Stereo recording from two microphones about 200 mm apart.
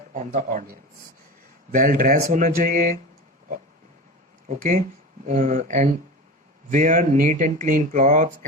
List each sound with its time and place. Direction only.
0.1 s speech: 40° right (ahead or behind)
4.4 s speech: 40° right (ahead or behind)